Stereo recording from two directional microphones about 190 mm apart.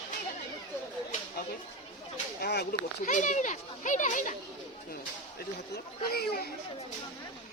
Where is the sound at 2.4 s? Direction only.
55° left (ahead or behind).